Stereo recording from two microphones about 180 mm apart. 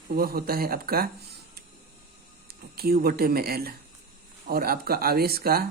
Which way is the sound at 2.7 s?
60° right (ahead or behind).